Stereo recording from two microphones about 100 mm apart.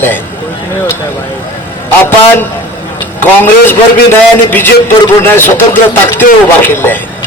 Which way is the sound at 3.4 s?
20° left (ahead or behind).